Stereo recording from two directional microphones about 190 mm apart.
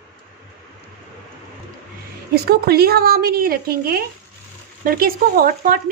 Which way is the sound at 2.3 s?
55° right (ahead or behind).